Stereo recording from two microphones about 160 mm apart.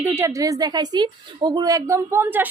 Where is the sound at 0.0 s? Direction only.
15° right (ahead or behind).